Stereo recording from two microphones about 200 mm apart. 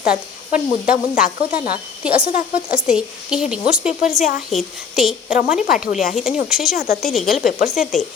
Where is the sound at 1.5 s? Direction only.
45° left (ahead or behind).